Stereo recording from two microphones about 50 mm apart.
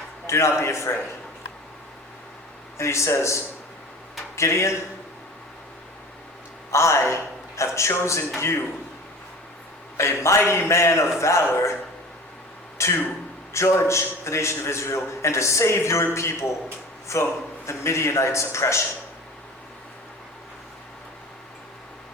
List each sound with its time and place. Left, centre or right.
0.3 s a man's voice: left
2.7 s a man's voice: left
6.7 s a man's voice: left
10.0 s a man's voice: left
12.8 s a man's voice: left